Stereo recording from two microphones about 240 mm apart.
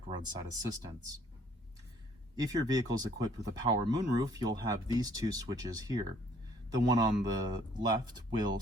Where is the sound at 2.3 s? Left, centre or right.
Centre.